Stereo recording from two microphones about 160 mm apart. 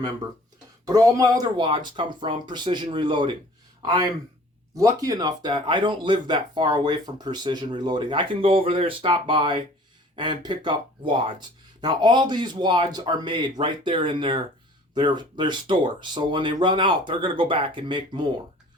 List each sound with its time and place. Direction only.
0.9 s speech: 20° right (ahead or behind)